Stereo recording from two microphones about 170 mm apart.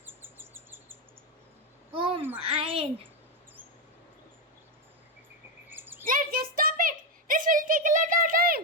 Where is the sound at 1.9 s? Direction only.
30° right (ahead or behind).